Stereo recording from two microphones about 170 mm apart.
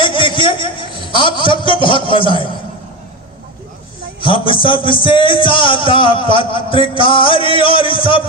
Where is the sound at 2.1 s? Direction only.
30° left (ahead or behind).